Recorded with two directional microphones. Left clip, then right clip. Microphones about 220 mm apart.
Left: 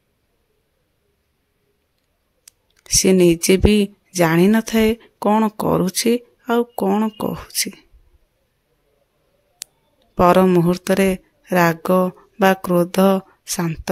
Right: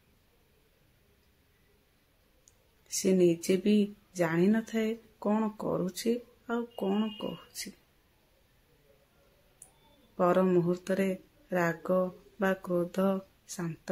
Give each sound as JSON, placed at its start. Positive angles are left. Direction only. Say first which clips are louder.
{"t": 2.8, "sound": "speech", "louder": "left 12 dB", "side_deg": 45}
{"t": 10.1, "sound": "speech", "louder": "left 13 dB", "side_deg": 50}